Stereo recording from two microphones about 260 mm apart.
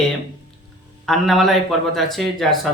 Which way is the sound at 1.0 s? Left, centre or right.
Centre.